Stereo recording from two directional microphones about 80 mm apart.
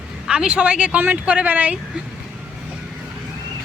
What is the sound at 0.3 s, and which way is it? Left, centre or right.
Speech, centre.